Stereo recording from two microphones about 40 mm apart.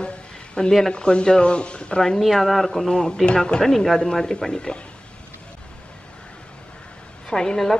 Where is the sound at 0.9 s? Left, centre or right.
Left.